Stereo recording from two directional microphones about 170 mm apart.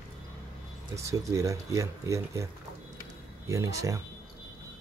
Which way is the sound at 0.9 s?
20° right (ahead or behind).